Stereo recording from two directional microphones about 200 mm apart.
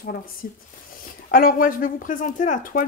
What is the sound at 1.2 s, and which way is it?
Speech, 45° left (ahead or behind).